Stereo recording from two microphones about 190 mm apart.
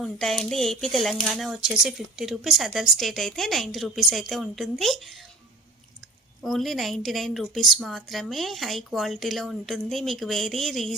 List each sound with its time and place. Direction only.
0.0 s speech: centre (ahead or behind)
6.4 s speech: centre (ahead or behind)